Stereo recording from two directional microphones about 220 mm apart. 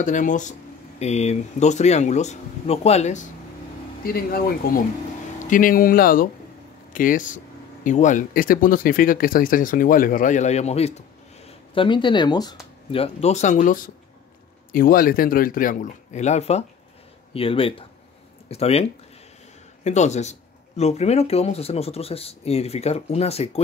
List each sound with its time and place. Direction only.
0.0 s speech: 35° left (ahead or behind)
4.0 s speech: 40° left (ahead or behind)